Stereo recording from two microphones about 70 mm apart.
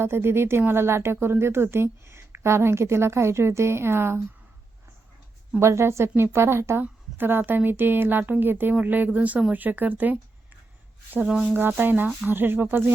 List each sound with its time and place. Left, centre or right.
0.0 s a woman's voice: right
5.5 s a woman's voice: right
11.3 s speech: centre
11.5 s a woman's voice: right